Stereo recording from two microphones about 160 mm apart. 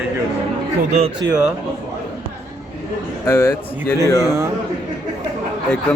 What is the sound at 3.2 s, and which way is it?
A man's voice, 15° left (ahead or behind).